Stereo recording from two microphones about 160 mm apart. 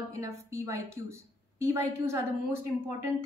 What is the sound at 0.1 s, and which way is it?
A woman's voice, 20° right (ahead or behind).